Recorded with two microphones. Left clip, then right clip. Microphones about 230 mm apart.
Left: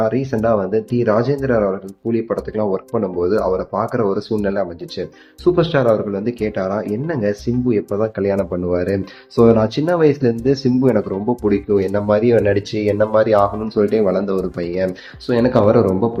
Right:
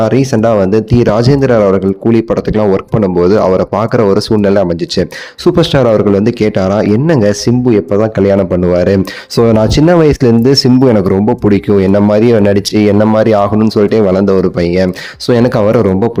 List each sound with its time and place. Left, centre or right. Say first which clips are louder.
0.0 s speech: right 8 dB; right
12.0 s speech: right 6 dB; right